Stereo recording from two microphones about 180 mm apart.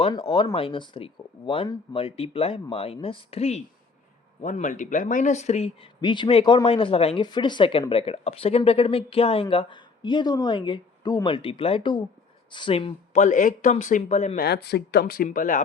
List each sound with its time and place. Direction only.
0.0 s speech: 30° left (ahead or behind)
13.1 s a man's voice: 45° left (ahead or behind)
14.3 s speech: 65° left (ahead or behind); by 15.6 s 45° left (ahead or behind)